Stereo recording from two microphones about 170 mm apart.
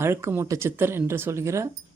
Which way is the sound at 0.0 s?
15° right (ahead or behind).